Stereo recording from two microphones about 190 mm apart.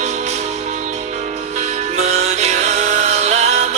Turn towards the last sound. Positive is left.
turn(degrees=-35)  # may be behind; listen again after turning